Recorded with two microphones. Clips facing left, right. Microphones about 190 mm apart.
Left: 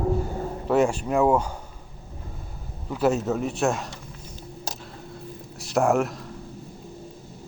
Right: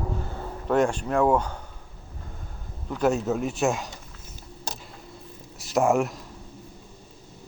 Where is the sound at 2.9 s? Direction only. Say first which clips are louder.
Left 1 dB; 5° left (ahead or behind).